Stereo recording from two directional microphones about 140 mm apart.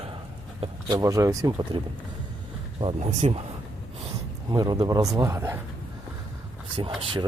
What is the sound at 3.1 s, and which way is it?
Speech, 50° right (ahead or behind).